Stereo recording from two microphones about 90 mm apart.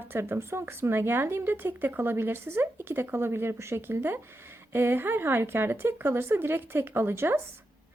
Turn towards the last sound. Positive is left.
turn(degrees=-25)  # may be behind; listen again after turning